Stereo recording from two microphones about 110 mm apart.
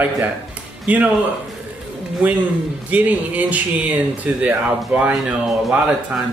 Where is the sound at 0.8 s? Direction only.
15° right (ahead or behind).